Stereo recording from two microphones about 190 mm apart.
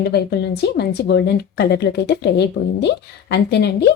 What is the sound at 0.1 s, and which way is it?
A woman's voice, 60° left (ahead or behind).